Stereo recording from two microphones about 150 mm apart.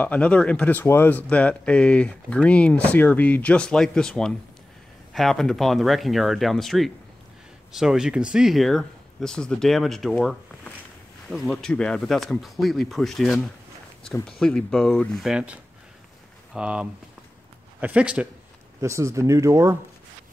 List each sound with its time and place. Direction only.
0.0 s speech: 10° left (ahead or behind)
14.4 s speech: 5° left (ahead or behind)
18.8 s speech: 20° right (ahead or behind)